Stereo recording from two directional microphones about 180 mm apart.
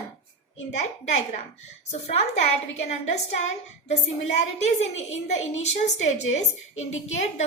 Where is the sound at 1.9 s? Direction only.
40° left (ahead or behind).